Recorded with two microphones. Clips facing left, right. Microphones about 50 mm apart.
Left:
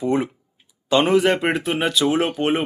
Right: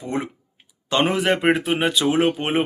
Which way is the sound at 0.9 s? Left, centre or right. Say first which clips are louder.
Left 3 dB; centre.